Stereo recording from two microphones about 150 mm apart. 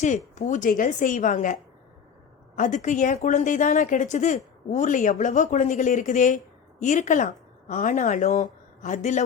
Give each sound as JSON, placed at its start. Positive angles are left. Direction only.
{"t": 0.3, "sound": "a woman's voice", "side_deg": 55}
{"t": 2.6, "sound": "a woman's voice", "side_deg": 55}